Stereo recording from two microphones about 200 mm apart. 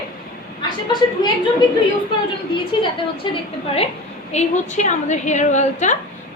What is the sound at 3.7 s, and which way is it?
A woman's voice, 30° left (ahead or behind).